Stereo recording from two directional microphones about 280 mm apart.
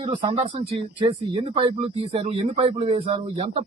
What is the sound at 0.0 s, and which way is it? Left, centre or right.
Speech, centre.